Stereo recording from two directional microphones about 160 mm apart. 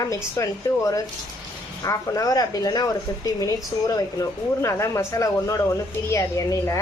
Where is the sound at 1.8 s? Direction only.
20° left (ahead or behind).